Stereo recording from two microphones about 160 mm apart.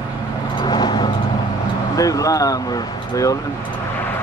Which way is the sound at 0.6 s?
25° left (ahead or behind).